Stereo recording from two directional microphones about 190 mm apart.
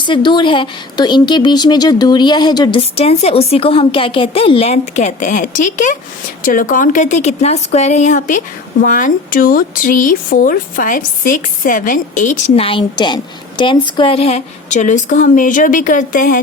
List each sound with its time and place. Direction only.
0.0 s speech: 25° left (ahead or behind); by 16.4 s 45° left (ahead or behind)